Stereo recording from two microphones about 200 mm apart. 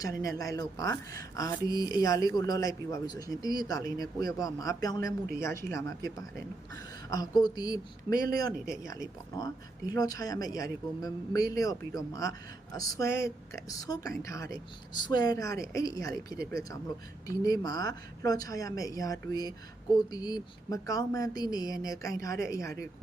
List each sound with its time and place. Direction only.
0.0 s a woman's voice: 15° left (ahead or behind)
9.4 s a woman's voice: 20° left (ahead or behind)
16.4 s speech: 50° right (ahead or behind)
17.2 s a woman's voice: 20° left (ahead or behind)